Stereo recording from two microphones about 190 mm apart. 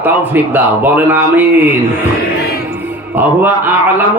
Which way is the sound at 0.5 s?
10° right (ahead or behind).